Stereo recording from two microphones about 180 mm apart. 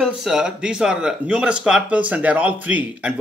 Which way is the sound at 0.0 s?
5° right (ahead or behind).